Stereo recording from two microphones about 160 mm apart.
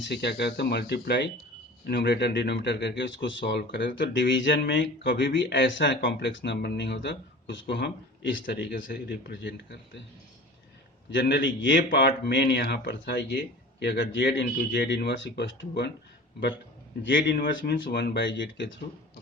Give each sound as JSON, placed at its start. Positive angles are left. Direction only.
{"t": 0.0, "sound": "speech", "side_deg": 90}
{"t": 11.1, "sound": "speech", "side_deg": 90}
{"t": 17.2, "sound": "speech", "side_deg": 70}